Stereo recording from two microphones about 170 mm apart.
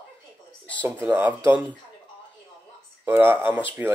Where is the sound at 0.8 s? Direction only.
10° right (ahead or behind).